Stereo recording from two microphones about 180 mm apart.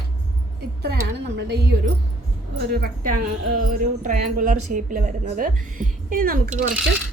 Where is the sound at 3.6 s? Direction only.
50° right (ahead or behind).